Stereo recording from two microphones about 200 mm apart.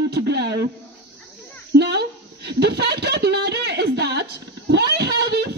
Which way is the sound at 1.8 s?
55° right (ahead or behind).